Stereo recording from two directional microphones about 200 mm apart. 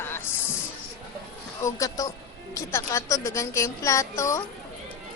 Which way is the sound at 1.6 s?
15° left (ahead or behind).